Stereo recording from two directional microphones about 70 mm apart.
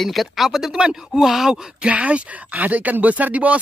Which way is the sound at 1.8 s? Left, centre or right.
Centre.